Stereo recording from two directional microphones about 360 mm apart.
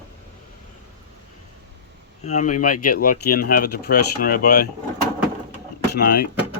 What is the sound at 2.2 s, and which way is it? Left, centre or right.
Speech, centre.